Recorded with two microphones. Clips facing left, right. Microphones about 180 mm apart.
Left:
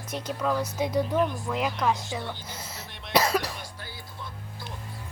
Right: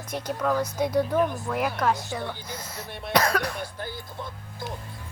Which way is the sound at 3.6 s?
50° right (ahead or behind).